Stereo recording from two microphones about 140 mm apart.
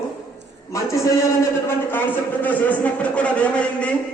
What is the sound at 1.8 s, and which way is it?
A man's voice, 15° left (ahead or behind).